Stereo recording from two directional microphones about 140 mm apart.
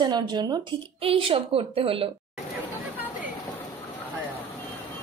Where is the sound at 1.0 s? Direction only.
40° right (ahead or behind).